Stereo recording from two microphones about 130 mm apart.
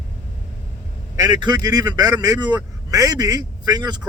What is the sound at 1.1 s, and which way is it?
A man's voice, 35° right (ahead or behind).